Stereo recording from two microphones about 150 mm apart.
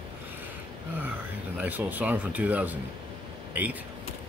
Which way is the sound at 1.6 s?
10° right (ahead or behind).